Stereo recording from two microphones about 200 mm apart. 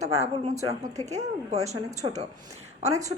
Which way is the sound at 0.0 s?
35° right (ahead or behind).